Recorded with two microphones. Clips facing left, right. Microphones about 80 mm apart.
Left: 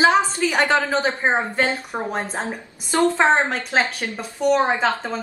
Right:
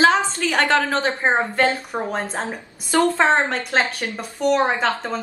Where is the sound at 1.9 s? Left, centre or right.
Centre.